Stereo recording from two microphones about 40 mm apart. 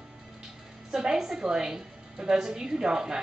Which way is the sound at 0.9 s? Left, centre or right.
Centre.